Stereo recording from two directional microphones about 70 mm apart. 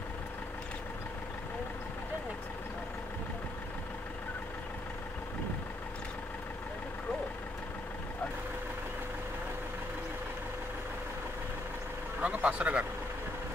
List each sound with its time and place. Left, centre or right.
12.2 s vehicle: right